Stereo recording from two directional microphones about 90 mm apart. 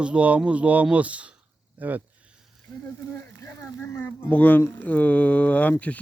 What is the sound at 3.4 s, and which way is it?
Speech, 25° left (ahead or behind).